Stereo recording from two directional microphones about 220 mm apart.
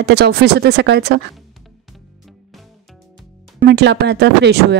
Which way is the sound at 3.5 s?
50° right (ahead or behind).